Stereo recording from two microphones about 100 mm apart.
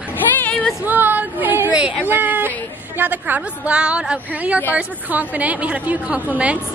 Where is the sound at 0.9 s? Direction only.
20° right (ahead or behind).